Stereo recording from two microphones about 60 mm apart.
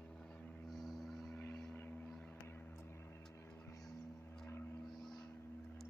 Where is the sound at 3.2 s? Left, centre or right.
Left.